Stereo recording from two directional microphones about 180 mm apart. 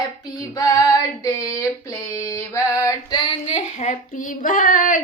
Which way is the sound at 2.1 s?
15° left (ahead or behind).